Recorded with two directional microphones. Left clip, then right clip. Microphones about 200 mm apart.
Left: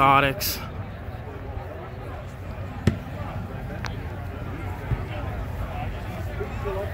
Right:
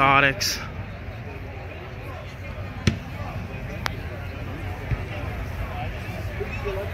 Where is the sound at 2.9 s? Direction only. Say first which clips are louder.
Right 1 dB; 50° left (ahead or behind).